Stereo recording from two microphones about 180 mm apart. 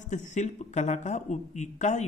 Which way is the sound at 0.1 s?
40° left (ahead or behind).